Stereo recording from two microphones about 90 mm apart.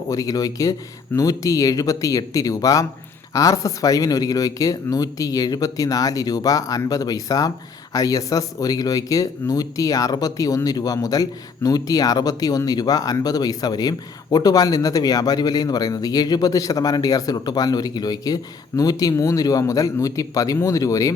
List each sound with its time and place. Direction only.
0.1 s speech: 40° left (ahead or behind)